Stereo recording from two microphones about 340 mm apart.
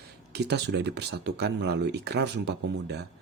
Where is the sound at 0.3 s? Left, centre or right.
Right.